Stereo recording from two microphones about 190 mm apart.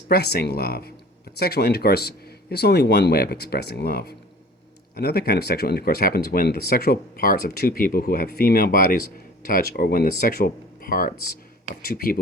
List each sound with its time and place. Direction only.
0.1 s speech: 55° left (ahead or behind)